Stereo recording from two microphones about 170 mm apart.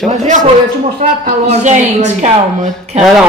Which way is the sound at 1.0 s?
40° right (ahead or behind).